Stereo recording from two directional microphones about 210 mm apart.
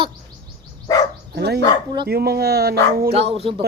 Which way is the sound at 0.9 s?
15° left (ahead or behind).